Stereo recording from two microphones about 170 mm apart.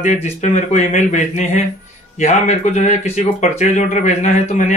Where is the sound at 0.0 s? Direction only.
40° left (ahead or behind).